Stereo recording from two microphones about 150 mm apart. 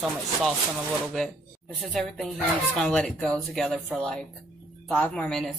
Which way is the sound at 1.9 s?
Centre (ahead or behind).